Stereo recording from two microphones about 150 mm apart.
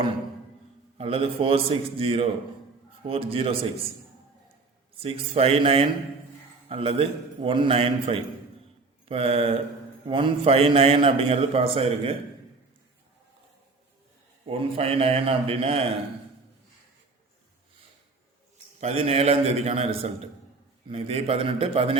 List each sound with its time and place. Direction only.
0.9 s a man's voice: 40° right (ahead or behind)
4.9 s a man's voice: 40° right (ahead or behind)
14.5 s a man's voice: 40° right (ahead or behind)
18.8 s a man's voice: 45° right (ahead or behind)